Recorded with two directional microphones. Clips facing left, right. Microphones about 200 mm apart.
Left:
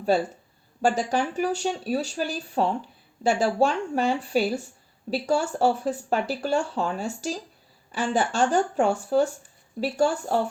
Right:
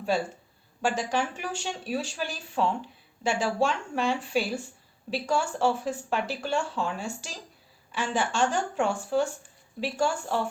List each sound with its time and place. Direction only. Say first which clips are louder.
0.8 s speech: left 4 dB; 40° left (ahead or behind)